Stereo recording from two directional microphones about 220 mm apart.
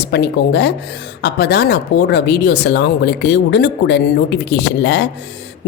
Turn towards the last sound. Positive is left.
turn(degrees=50)  # may be behind; listen again after turning